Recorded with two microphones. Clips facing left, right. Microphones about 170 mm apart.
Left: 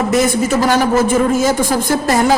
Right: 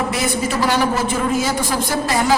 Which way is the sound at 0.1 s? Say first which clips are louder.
Left 7 dB; 45° left (ahead or behind).